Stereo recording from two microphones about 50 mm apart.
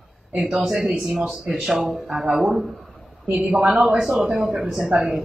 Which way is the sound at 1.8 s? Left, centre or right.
Right.